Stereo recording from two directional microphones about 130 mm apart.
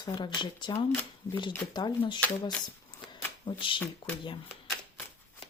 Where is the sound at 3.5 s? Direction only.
40° left (ahead or behind).